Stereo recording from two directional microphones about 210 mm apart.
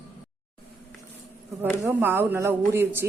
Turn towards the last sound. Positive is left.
turn(degrees=-10)  # may be behind; listen again after turning